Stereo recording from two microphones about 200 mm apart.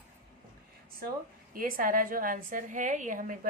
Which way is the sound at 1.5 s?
45° right (ahead or behind).